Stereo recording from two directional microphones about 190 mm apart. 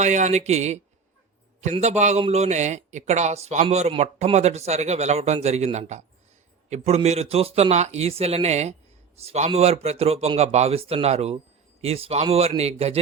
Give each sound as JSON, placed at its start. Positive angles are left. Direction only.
{"t": 0.0, "sound": "a man's voice", "side_deg": -40}